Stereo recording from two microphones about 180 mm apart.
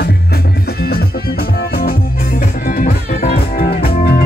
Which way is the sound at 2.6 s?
50° left (ahead or behind).